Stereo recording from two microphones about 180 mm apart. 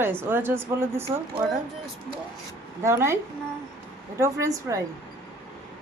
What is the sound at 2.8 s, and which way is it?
A woman's voice, 15° right (ahead or behind).